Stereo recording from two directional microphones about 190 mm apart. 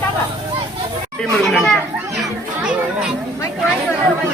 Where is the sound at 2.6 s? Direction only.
5° right (ahead or behind).